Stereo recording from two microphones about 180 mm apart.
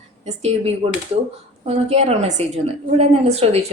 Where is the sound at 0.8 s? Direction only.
30° right (ahead or behind).